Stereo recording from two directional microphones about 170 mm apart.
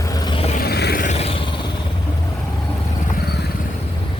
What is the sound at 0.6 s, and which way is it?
Music, 70° left (ahead or behind).